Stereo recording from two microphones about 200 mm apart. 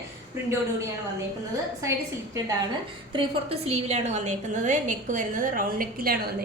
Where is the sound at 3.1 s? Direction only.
30° right (ahead or behind).